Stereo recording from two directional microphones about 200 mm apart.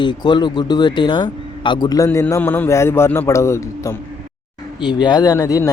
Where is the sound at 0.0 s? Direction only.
20° left (ahead or behind).